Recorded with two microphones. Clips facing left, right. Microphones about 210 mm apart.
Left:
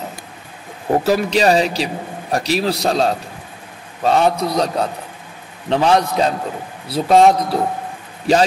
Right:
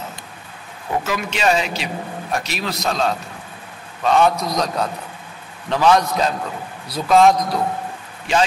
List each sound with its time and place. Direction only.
0.8 s a man's voice: 40° left (ahead or behind)